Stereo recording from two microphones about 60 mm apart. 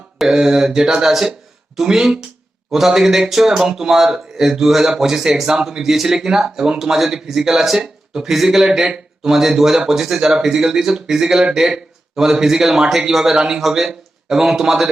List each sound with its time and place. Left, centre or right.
0.2 s speech: centre